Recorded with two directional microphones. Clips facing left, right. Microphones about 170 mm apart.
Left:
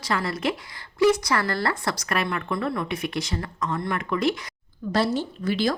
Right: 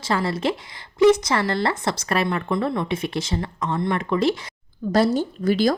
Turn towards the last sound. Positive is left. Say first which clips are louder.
# right 5 dB
turn(degrees=-40)  # may be behind; listen again after turning